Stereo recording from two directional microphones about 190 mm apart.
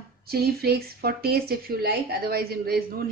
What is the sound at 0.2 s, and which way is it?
A woman's voice, 55° right (ahead or behind).